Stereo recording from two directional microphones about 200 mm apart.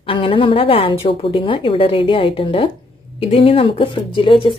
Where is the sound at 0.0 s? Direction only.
25° left (ahead or behind).